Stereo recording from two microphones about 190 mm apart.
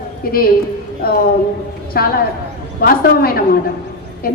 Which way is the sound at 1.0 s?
55° left (ahead or behind).